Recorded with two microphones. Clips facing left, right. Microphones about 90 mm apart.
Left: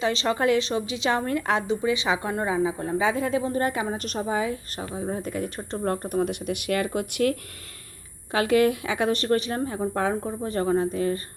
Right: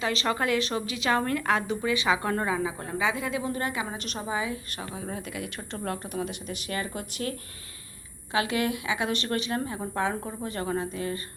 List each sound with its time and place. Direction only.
0.0 s a woman's voice: 30° left (ahead or behind); by 7.3 s 60° left (ahead or behind)
8.3 s a woman's voice: 45° left (ahead or behind)